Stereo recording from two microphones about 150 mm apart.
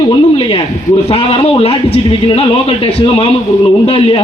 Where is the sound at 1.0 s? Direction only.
40° left (ahead or behind).